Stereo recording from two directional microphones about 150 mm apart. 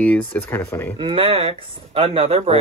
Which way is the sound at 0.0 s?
10° left (ahead or behind).